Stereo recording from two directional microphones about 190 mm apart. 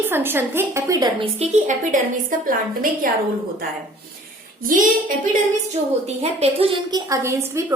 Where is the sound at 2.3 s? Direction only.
45° right (ahead or behind).